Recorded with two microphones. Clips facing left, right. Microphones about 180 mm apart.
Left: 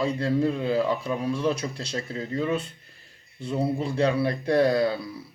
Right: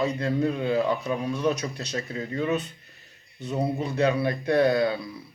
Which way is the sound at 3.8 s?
30° left (ahead or behind).